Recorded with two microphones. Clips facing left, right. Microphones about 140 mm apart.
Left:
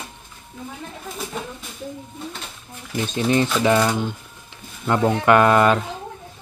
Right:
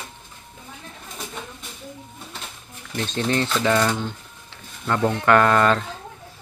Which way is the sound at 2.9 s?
10° left (ahead or behind).